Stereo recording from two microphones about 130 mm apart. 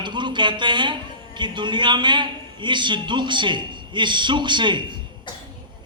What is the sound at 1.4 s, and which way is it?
A man's voice, 35° right (ahead or behind).